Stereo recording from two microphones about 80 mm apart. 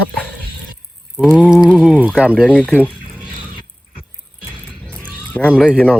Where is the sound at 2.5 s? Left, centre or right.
Centre.